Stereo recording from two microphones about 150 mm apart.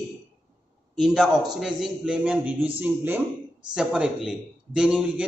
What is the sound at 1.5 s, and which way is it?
A man's voice, centre (ahead or behind).